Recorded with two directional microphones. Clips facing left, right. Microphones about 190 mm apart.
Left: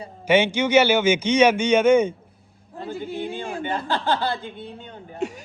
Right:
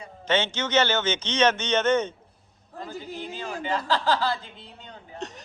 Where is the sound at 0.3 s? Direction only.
10° left (ahead or behind).